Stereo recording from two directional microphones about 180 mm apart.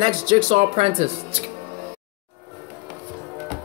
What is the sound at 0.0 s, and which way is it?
Speech, 25° right (ahead or behind).